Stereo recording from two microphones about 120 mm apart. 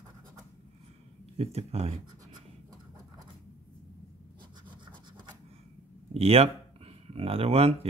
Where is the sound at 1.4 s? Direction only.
60° right (ahead or behind).